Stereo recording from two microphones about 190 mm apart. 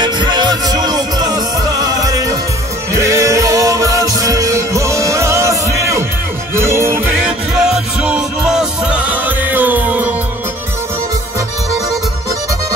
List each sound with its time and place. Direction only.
0.0 s music: 25° right (ahead or behind)